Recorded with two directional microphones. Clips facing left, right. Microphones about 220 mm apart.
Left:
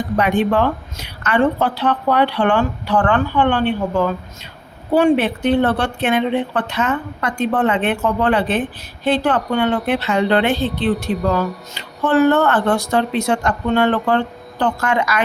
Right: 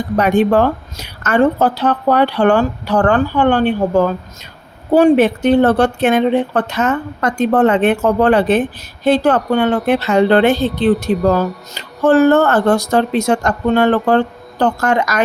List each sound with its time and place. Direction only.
0.2 s a woman's voice: 40° right (ahead or behind)